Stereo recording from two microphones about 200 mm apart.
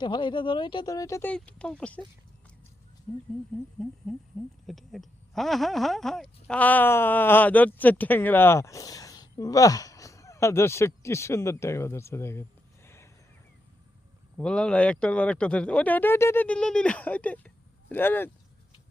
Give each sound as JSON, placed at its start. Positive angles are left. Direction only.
{"t": 0.0, "sound": "speech", "side_deg": 20}
{"t": 3.8, "sound": "a sound", "side_deg": 0}
{"t": 4.6, "sound": "speech", "side_deg": 0}
{"t": 14.3, "sound": "speech", "side_deg": 5}